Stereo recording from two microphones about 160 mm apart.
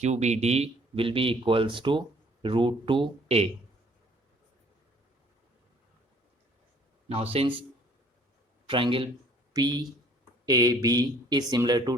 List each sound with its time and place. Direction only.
0.0 s speech: 45° right (ahead or behind)
7.1 s speech: 35° right (ahead or behind)
8.6 s a man's voice: 30° right (ahead or behind)